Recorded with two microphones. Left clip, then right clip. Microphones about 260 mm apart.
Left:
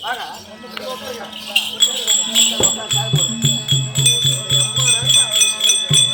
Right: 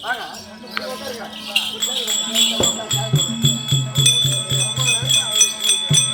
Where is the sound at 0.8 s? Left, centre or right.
Left.